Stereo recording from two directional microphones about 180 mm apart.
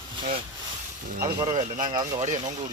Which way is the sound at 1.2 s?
45° right (ahead or behind).